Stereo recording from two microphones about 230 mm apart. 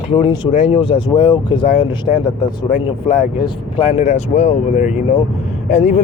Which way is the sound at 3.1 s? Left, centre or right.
Left.